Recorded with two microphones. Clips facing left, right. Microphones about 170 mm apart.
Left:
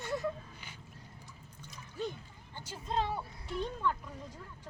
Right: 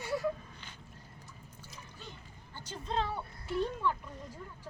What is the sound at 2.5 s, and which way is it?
Speech, 10° left (ahead or behind).